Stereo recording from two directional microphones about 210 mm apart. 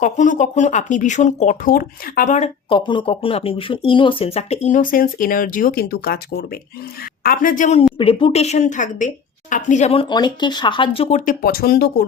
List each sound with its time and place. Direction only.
0.0 s speech: 35° left (ahead or behind)
11.4 s speech: 45° left (ahead or behind)